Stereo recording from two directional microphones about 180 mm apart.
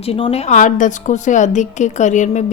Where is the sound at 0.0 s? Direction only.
35° left (ahead or behind).